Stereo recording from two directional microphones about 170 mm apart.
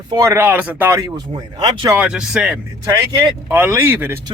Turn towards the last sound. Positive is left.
turn(degrees=-15)  # may be behind; listen again after turning